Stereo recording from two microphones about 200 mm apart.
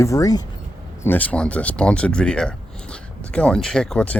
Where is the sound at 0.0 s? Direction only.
15° left (ahead or behind).